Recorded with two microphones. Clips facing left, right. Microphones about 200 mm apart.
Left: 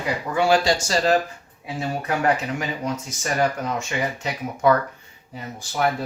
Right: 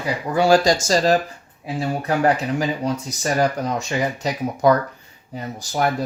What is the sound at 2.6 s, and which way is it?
Speech, 35° right (ahead or behind).